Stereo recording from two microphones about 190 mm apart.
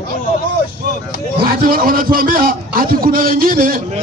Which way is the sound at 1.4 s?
50° right (ahead or behind).